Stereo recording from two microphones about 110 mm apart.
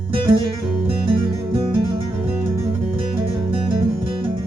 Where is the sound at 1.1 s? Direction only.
50° right (ahead or behind).